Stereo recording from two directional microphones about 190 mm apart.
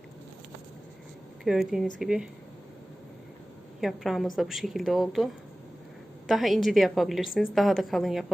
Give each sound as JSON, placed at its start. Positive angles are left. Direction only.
{"t": 1.5, "sound": "a woman's voice", "side_deg": 0}
{"t": 3.8, "sound": "a woman's voice", "side_deg": 0}